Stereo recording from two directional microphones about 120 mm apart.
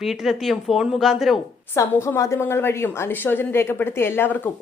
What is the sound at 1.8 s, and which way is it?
A woman's voice, 25° left (ahead or behind).